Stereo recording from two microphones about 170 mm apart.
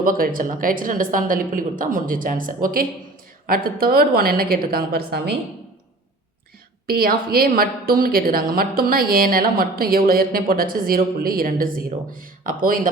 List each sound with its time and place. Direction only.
0.0 s a woman's voice: 55° right (ahead or behind); by 5.4 s 75° right (ahead or behind)
6.8 s a woman's voice: 60° right (ahead or behind)